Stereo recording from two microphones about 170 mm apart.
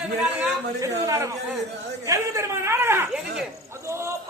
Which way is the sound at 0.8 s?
20° right (ahead or behind).